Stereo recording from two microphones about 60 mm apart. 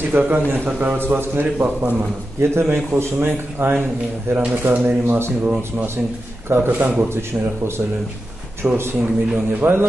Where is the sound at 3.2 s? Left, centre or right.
Right.